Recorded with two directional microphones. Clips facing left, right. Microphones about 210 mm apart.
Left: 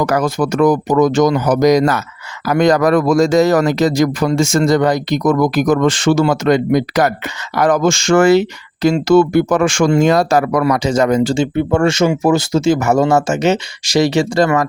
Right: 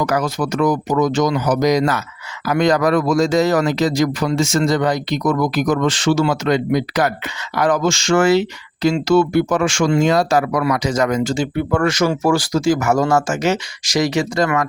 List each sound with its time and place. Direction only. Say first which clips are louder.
0.0 s speech: left 4 dB; 50° left (ahead or behind)
10.8 s speech: left 4 dB; 30° left (ahead or behind)